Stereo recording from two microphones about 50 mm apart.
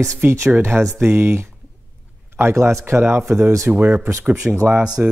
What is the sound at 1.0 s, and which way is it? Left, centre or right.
Speech, right.